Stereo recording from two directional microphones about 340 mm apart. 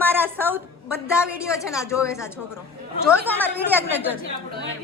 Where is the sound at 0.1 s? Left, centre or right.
Centre.